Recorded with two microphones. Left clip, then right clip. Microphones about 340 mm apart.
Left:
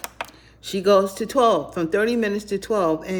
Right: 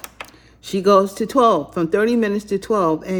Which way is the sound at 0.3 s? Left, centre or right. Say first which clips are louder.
Right 3 dB; centre.